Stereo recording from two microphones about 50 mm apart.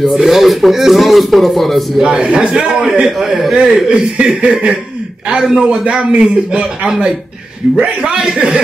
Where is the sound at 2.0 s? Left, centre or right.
Centre.